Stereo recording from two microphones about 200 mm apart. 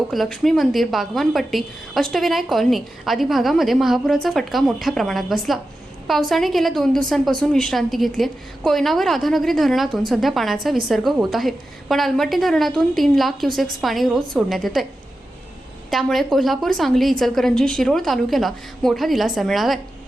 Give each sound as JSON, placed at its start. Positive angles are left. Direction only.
{"t": 0.1, "sound": "a woman's voice", "side_deg": 0}
{"t": 15.9, "sound": "a woman's voice", "side_deg": 0}